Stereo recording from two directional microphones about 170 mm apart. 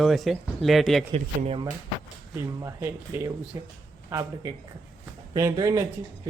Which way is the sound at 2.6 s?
15° right (ahead or behind).